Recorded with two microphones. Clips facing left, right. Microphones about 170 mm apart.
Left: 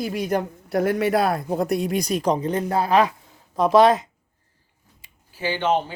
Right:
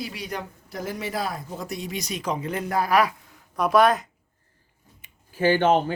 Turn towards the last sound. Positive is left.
turn(degrees=-50)  # may be behind; listen again after turning